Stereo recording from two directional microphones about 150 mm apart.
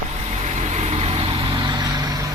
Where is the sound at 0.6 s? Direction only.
45° right (ahead or behind); by 2.3 s 25° right (ahead or behind).